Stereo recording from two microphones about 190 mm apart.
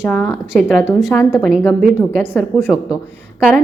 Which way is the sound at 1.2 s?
15° left (ahead or behind).